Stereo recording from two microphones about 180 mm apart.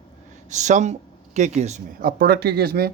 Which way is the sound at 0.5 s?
40° right (ahead or behind).